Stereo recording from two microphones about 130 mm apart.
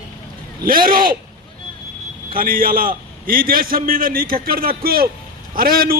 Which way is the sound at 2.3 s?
90° right.